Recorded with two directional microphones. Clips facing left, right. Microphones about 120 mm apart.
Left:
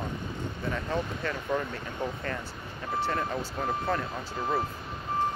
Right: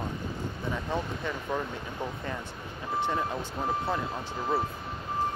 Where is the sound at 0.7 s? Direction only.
15° right (ahead or behind).